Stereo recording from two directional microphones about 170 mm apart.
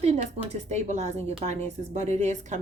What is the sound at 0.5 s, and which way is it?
A woman's voice, 40° right (ahead or behind).